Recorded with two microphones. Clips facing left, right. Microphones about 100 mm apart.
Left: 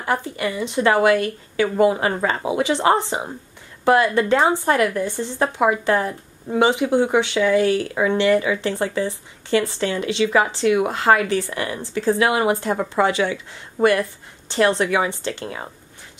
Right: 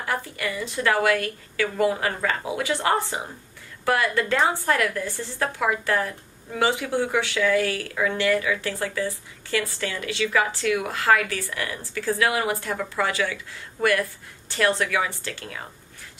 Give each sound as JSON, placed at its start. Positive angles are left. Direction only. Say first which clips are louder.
{"t": 0.0, "sound": "speech", "louder": "left 5 dB", "side_deg": 25}